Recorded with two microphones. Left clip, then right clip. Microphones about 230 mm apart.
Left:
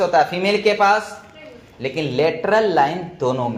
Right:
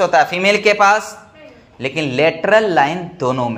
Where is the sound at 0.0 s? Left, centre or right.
Right.